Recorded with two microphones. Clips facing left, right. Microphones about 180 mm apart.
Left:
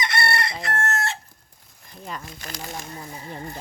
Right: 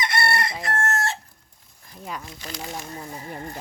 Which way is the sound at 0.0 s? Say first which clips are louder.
Right 1 dB; 50° right (ahead or behind).